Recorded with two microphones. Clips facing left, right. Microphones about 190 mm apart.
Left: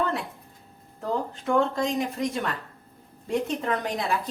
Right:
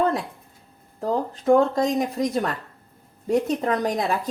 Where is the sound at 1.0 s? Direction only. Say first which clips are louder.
Right 7 dB; 40° right (ahead or behind).